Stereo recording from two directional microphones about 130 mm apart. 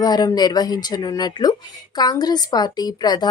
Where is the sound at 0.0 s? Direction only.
30° left (ahead or behind).